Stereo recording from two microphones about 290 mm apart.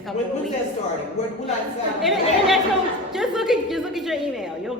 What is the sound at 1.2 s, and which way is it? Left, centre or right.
Speech, left.